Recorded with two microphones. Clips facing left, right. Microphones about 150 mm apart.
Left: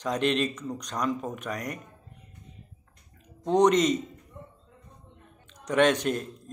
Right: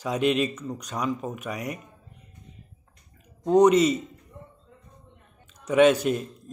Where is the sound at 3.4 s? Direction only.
5° right (ahead or behind).